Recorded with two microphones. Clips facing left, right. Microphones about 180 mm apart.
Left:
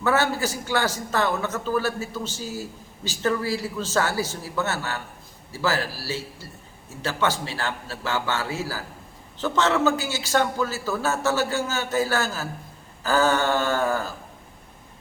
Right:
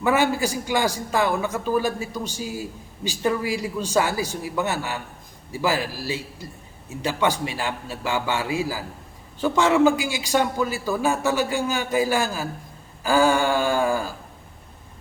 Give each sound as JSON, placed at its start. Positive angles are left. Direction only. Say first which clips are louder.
{"t": 0.0, "sound": "a man's voice", "louder": "right 2 dB", "side_deg": -15}